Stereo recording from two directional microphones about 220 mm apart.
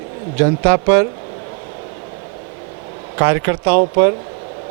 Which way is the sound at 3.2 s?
15° right (ahead or behind).